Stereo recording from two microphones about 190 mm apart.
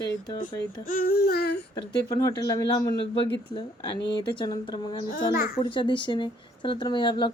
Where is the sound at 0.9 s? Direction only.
50° left (ahead or behind).